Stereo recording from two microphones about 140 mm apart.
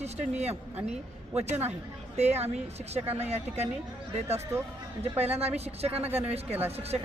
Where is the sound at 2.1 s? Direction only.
50° right (ahead or behind).